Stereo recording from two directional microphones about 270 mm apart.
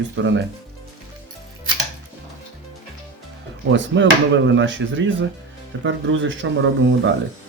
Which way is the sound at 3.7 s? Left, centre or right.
Right.